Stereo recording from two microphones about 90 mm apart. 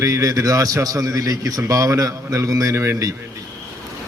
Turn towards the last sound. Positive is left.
turn(degrees=-35)  # may be behind; listen again after turning